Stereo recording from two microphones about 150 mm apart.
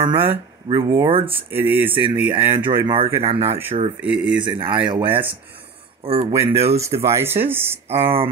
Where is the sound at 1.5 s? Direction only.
15° right (ahead or behind).